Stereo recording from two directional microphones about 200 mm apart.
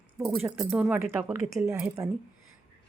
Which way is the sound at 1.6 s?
15° right (ahead or behind).